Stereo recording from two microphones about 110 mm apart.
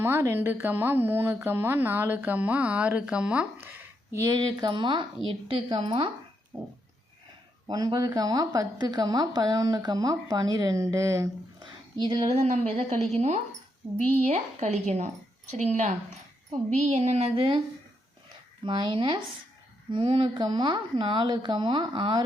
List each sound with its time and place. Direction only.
0.0 s speech: 20° right (ahead or behind)
4.4 s speech: 40° right (ahead or behind); by 6.1 s 60° right (ahead or behind)
6.5 s speech: 25° right (ahead or behind)
7.9 s speech: 35° right (ahead or behind)
11.6 s a sound: 45° right (ahead or behind)
12.4 s speech: 90° right; by 17.4 s 75° right (ahead or behind)
18.6 s speech: 45° right (ahead or behind)